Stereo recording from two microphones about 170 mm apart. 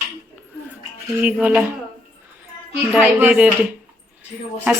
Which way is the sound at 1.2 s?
10° right (ahead or behind).